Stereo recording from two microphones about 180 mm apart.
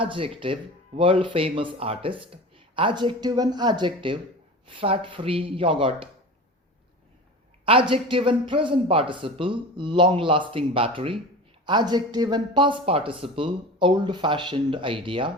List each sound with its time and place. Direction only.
0.0 s speech: 30° right (ahead or behind)
7.6 s speech: 30° right (ahead or behind)